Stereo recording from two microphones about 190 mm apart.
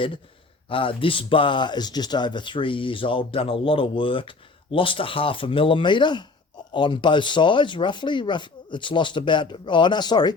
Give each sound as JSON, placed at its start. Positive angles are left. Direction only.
{"t": 0.7, "sound": "speech", "side_deg": 25}